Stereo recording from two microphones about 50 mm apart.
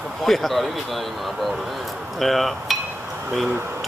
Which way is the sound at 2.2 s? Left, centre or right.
Centre.